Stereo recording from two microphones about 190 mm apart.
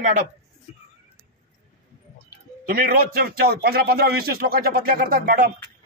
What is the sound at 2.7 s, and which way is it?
A man's voice, 55° right (ahead or behind).